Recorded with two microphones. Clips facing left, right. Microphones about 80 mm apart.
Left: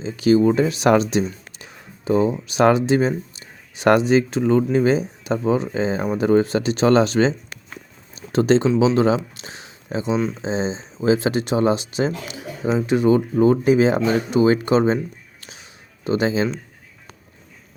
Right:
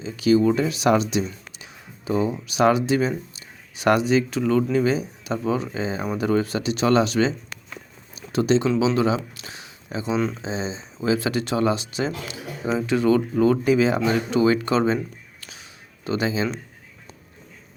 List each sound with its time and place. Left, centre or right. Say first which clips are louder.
0.0 s speech: left 3 dB; left
0.9 s speech: left 3 dB; left
15.4 s a sound: left 2 dB; left